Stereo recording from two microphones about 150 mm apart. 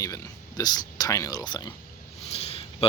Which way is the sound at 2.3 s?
40° left (ahead or behind).